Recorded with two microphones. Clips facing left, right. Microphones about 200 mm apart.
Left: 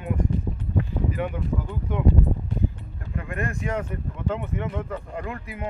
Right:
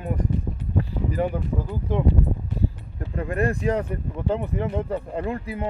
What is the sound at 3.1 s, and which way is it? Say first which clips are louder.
Speech: right 6 dB; 35° right (ahead or behind).